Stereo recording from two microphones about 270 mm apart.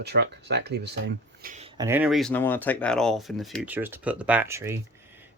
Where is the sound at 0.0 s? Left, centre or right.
Right.